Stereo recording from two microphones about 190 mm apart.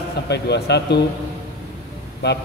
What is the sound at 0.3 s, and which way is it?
Speech, 60° left (ahead or behind).